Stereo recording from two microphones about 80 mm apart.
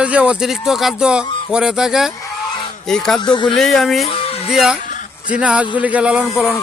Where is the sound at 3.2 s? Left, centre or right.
Left.